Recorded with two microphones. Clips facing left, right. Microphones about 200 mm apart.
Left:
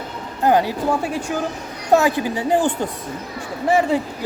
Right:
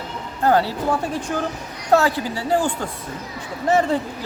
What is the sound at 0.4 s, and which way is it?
Speech, 15° left (ahead or behind).